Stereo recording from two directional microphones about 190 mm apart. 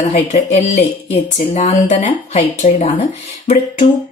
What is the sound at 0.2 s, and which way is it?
A woman's voice, 35° left (ahead or behind).